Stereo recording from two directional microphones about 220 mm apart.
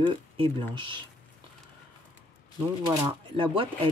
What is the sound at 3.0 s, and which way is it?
Speech, 25° right (ahead or behind).